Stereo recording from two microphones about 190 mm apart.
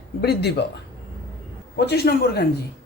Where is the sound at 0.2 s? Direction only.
60° left (ahead or behind).